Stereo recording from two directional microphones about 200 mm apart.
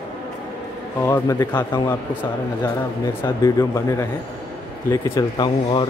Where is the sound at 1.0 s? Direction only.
15° left (ahead or behind).